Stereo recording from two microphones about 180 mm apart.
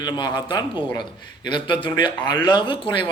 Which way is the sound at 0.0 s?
25° left (ahead or behind).